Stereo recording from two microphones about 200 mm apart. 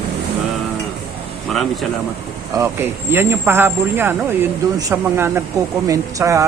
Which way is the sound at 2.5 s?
15° right (ahead or behind).